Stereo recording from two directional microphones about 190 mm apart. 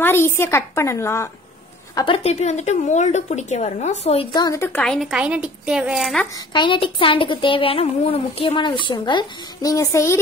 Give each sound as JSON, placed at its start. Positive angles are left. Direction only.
{"t": 0.0, "sound": "a woman's voice", "side_deg": 10}
{"t": 2.0, "sound": "a woman's voice", "side_deg": 30}
{"t": 4.7, "sound": "a woman's voice", "side_deg": 0}
{"t": 6.3, "sound": "a woman's voice", "side_deg": 25}